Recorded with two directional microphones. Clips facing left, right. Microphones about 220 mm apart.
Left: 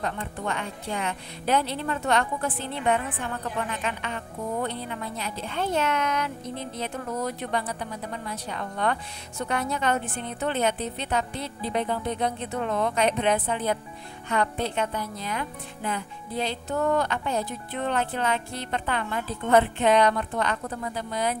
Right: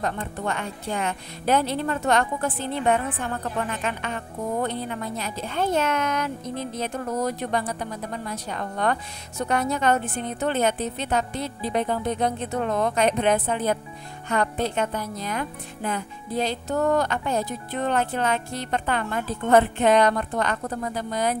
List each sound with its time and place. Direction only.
0.0 s a woman's voice: 45° right (ahead or behind)